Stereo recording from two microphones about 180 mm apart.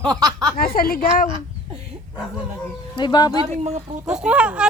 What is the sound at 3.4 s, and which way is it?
Speech, 35° right (ahead or behind).